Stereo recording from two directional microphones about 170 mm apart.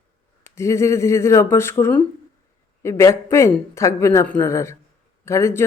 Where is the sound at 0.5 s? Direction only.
15° left (ahead or behind).